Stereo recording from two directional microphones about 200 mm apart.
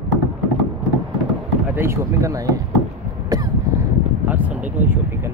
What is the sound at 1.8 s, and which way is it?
Speech, 15° right (ahead or behind).